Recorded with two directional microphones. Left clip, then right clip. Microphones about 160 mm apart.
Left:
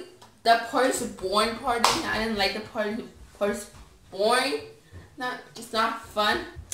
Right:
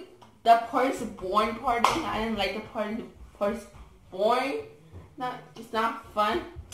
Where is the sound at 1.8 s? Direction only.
10° left (ahead or behind).